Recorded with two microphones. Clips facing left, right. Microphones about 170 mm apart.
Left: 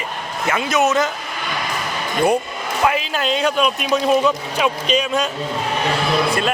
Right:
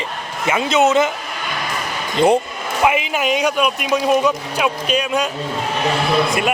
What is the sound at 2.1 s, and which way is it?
Speech, 25° right (ahead or behind).